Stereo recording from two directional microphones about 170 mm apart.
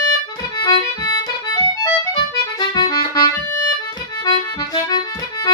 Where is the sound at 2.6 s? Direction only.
25° left (ahead or behind).